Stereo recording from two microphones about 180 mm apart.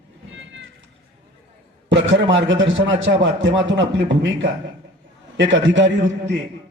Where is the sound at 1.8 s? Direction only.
90° right.